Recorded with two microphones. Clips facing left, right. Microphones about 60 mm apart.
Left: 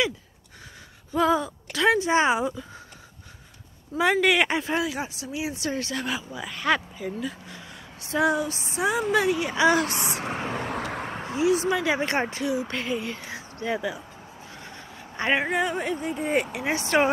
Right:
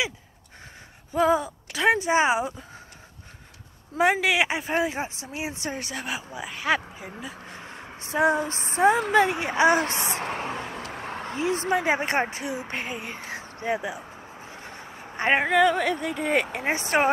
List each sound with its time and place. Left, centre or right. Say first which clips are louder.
1.1 s speech: right 1 dB; centre
4.2 s speech: left 2 dB; centre
4.6 s speech: right 1 dB; right
7.4 s a sound: right 3 dB; right
8.1 s speech: right 1 dB; right
11.7 s speech: right 1 dB; right
15.5 s speech: right 5 dB; right
16.5 s speech: left 1 dB; right